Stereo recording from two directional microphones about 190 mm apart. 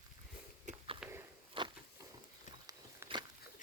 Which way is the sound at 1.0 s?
10° right (ahead or behind).